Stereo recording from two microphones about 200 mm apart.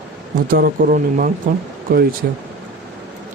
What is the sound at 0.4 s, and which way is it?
Speech, 45° right (ahead or behind).